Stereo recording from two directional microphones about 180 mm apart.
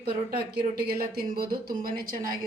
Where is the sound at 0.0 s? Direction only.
65° right (ahead or behind).